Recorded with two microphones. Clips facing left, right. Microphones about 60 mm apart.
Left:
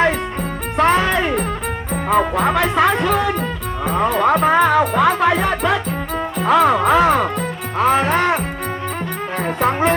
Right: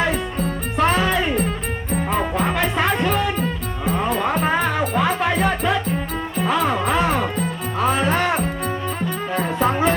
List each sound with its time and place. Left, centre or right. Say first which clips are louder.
0.0 s music: left 4 dB; left
1.9 s music: left 5 dB; left
7.8 s music: left 4 dB; left